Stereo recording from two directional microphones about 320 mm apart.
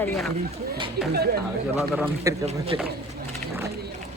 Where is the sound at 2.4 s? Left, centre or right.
Centre.